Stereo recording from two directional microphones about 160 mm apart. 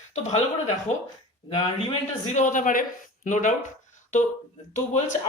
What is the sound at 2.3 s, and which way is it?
Speech, 55° left (ahead or behind).